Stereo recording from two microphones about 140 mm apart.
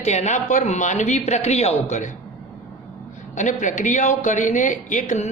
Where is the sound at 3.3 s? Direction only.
60° left (ahead or behind).